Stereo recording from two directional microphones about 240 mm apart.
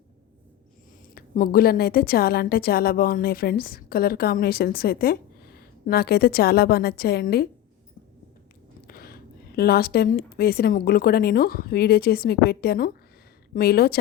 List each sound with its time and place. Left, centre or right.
1.1 s a woman's voice: left
8.9 s a woman's voice: left